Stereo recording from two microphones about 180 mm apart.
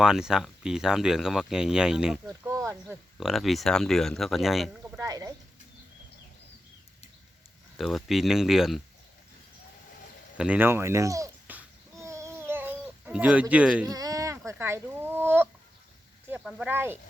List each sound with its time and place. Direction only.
0.0 s speech: 5° right (ahead or behind)
2.2 s a sound: 15° right (ahead or behind)
2.9 s speech: centre (ahead or behind)
4.9 s speech: 20° right (ahead or behind)
7.8 s speech: centre (ahead or behind)
10.3 s babbling: 5° right (ahead or behind)
13.8 s speech: 20° right (ahead or behind)